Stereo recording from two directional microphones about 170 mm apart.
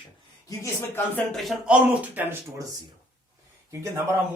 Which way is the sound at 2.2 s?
15° right (ahead or behind).